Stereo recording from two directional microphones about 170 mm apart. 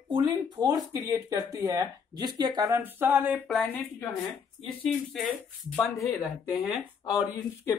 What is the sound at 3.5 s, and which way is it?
Speech, centre (ahead or behind).